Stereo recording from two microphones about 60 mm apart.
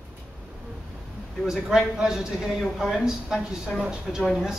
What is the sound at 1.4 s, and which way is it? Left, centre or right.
Speech, centre.